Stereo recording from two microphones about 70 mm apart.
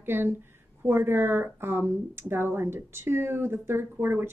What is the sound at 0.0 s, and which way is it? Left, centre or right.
A woman's voice, right.